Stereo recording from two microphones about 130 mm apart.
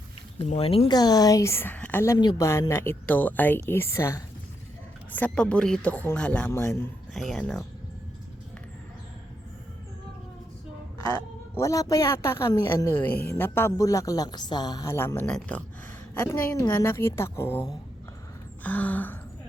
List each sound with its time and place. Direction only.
0.5 s speech: 50° left (ahead or behind)
0.9 s a woman's voice: 30° left (ahead or behind)
5.1 s a woman's voice: 10° left (ahead or behind)
7.1 s speech: centre (ahead or behind)
11.5 s a woman's voice: 25° left (ahead or behind)
14.9 s a woman's voice: 15° left (ahead or behind)
18.6 s gasp: 10° left (ahead or behind)